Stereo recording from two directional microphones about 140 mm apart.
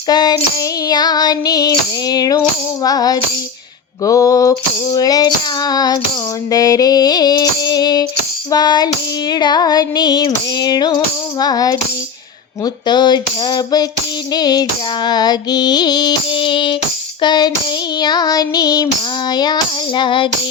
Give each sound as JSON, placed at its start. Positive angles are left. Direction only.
{"t": 0.1, "sound": "music", "side_deg": 30}